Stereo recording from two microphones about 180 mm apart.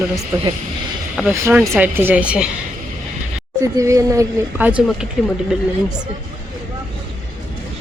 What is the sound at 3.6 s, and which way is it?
Speech, 15° right (ahead or behind).